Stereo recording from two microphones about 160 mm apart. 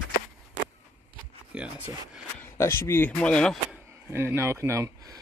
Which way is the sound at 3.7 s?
15° right (ahead or behind).